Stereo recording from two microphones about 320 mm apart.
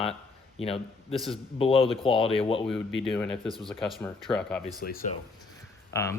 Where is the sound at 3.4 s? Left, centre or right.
Centre.